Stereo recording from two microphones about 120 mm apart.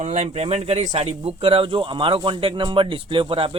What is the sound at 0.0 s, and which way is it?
A man's voice, 65° right (ahead or behind).